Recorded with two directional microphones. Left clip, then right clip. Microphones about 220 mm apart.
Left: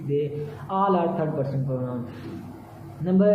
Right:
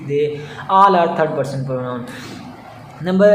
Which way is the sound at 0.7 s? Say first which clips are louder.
Right 12 dB; 15° right (ahead or behind).